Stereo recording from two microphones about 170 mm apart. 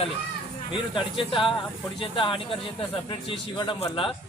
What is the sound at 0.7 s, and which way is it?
A man's voice, 30° left (ahead or behind).